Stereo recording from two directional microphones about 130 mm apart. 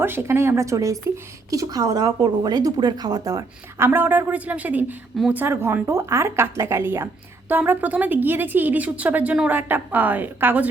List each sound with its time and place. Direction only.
0.0 s speech: 20° right (ahead or behind)
3.8 s speech: 15° right (ahead or behind)